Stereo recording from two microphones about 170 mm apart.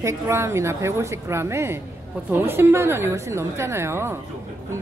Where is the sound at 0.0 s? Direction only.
15° right (ahead or behind).